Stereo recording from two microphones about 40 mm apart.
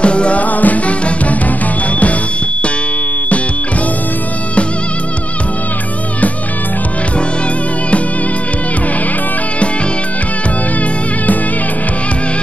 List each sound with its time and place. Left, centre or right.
0.0 s music: left
0.4 s music: left